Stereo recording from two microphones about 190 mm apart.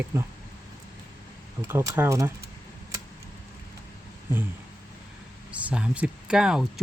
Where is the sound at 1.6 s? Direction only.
15° right (ahead or behind).